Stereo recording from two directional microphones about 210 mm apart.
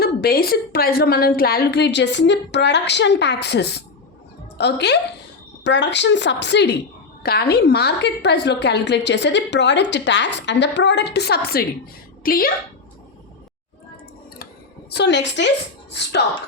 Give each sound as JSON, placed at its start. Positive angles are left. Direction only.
{"t": 0.0, "sound": "a woman's voice", "side_deg": 45}
{"t": 14.8, "sound": "a woman's voice", "side_deg": 55}